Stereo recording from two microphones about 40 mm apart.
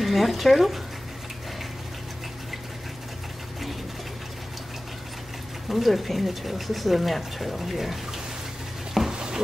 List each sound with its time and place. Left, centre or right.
0.0 s speech: centre
5.7 s speech: centre
9.1 s a sound: centre